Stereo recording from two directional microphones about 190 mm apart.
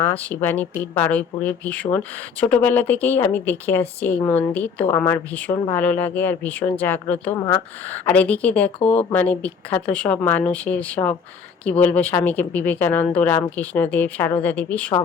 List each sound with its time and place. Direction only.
0.0 s speech: 10° left (ahead or behind)
8.8 s speech: 30° left (ahead or behind)
9.0 s speech: 10° left (ahead or behind)